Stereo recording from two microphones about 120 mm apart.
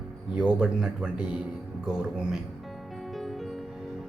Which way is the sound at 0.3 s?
5° right (ahead or behind).